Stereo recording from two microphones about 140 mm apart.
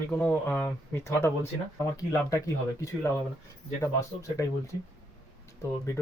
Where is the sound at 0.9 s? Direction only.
15° left (ahead or behind).